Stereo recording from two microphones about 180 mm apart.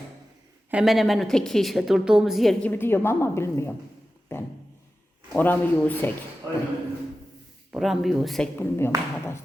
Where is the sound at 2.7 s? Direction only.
10° left (ahead or behind).